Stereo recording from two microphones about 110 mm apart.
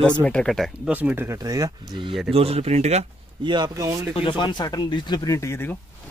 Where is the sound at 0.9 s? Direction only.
15° right (ahead or behind).